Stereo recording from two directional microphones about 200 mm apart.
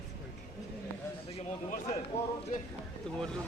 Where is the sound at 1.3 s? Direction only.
35° left (ahead or behind).